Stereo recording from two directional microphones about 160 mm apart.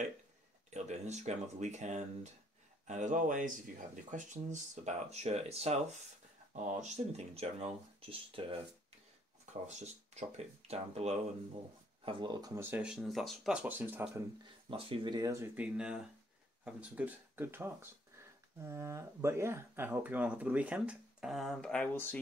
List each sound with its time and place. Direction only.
0.7 s speech: 45° right (ahead or behind)
9.5 s speech: 45° right (ahead or behind)
12.0 s speech: 30° right (ahead or behind); by 14.2 s 10° right (ahead or behind)
14.7 s speech: 35° right (ahead or behind); by 22.2 s 10° left (ahead or behind)